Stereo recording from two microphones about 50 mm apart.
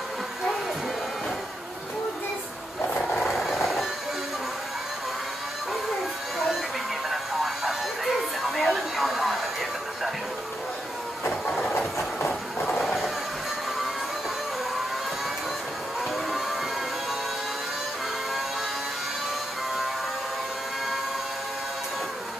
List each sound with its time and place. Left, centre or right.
3.2 s vehicle: centre
7.1 s television: centre
12.3 s train: centre
12.8 s vehicle: centre